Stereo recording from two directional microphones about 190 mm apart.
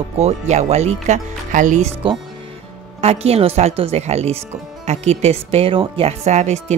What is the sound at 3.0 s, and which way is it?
Speech, 35° right (ahead or behind).